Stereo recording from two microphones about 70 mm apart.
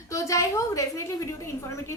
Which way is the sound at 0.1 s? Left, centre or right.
Left.